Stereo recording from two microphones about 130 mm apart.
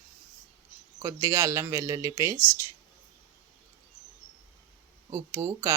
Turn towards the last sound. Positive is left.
turn(degrees=-25)  # may be behind; listen again after turning